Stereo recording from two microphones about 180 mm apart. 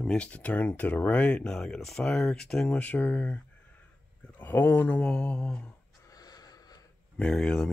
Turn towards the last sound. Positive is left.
turn(degrees=5)  # may be behind; listen again after turning